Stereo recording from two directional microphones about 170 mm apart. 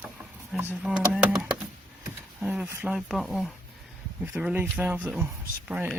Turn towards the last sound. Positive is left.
turn(degrees=-5)  # may be behind; listen again after turning